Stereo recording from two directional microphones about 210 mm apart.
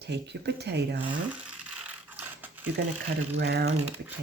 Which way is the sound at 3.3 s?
50° right (ahead or behind).